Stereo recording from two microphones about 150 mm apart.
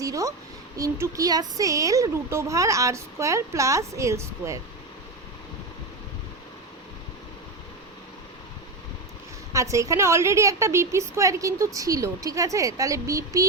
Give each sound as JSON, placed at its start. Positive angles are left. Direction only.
{"t": 0.0, "sound": "a child's voice", "side_deg": -20}
{"t": 9.5, "sound": "a woman's voice", "side_deg": -20}